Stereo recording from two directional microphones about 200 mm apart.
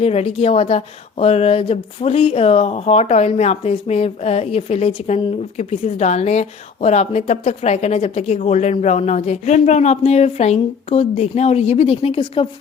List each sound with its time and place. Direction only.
0.0 s speech: 30° left (ahead or behind)